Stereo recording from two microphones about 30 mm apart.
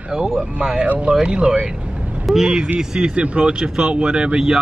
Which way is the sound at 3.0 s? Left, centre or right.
Right.